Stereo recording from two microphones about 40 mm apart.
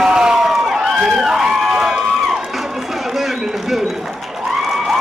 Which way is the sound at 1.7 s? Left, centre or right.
Centre.